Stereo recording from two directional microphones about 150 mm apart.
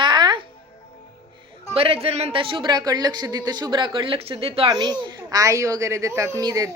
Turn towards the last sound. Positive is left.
turn(degrees=-20)  # may be behind; listen again after turning